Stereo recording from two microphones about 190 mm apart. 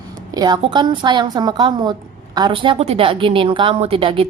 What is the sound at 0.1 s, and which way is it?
A woman's voice, 20° right (ahead or behind).